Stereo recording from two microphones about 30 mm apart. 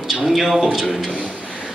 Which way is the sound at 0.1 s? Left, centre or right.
Centre.